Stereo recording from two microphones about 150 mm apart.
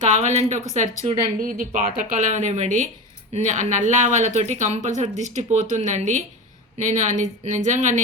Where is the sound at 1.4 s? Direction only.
65° right (ahead or behind).